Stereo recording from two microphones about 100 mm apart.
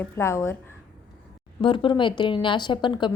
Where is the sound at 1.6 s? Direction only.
55° left (ahead or behind).